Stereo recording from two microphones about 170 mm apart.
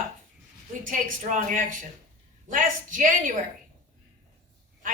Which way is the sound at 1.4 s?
50° right (ahead or behind).